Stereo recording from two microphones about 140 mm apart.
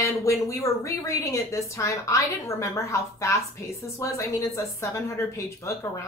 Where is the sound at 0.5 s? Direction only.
20° left (ahead or behind).